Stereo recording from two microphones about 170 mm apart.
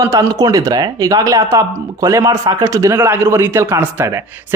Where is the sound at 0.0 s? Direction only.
20° right (ahead or behind).